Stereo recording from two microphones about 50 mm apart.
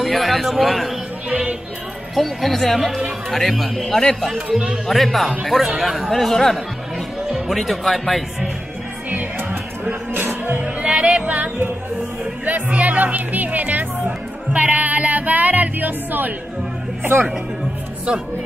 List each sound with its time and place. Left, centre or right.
0.0 s a man's voice: centre
1.3 s music: right
2.1 s speech: centre
4.5 s speech: centre
4.8 s speech: centre
7.2 s speech: centre
9.1 s music: right
10.6 s music: right
17.0 s speech: right